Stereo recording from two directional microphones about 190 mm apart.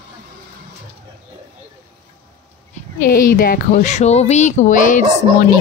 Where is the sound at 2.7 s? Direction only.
45° left (ahead or behind).